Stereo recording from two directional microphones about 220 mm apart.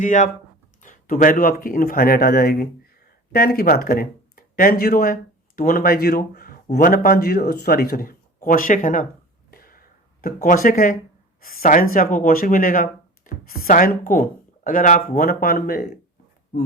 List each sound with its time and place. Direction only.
0.0 s speech: 35° left (ahead or behind)
9.5 s a sound: 40° left (ahead or behind)
11.4 s speech: 40° left (ahead or behind)